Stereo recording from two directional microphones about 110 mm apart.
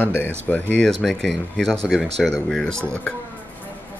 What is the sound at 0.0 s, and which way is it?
Speech, 15° left (ahead or behind).